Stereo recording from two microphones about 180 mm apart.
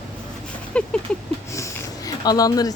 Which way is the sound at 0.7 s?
5° left (ahead or behind).